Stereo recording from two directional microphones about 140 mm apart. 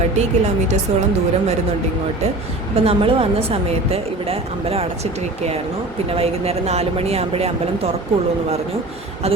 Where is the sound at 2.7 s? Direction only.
45° right (ahead or behind).